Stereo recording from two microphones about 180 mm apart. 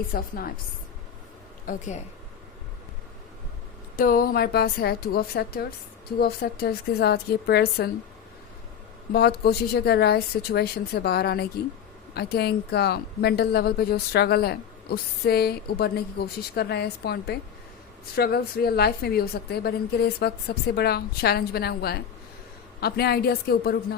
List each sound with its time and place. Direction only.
0.1 s a woman's voice: 55° left (ahead or behind)
1.6 s a woman's voice: 45° left (ahead or behind)
3.9 s a woman's voice: 55° left (ahead or behind)
9.1 s a woman's voice: 60° left (ahead or behind)